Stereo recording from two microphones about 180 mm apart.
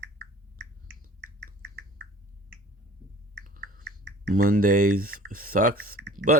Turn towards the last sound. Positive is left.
turn(degrees=-45)  # may be behind; listen again after turning